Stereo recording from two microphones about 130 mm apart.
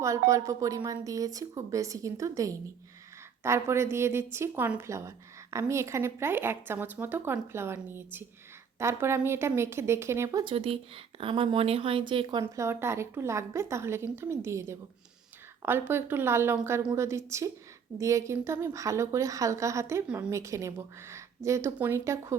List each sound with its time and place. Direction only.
0.0 s a woman's voice: 25° right (ahead or behind)
10.5 s a woman's voice: 45° right (ahead or behind)
12.5 s a woman's voice: 20° right (ahead or behind)
15.9 s a woman's voice: 15° right (ahead or behind)
20.1 s a woman's voice: 10° right (ahead or behind)
20.3 s a woman's voice: 25° right (ahead or behind)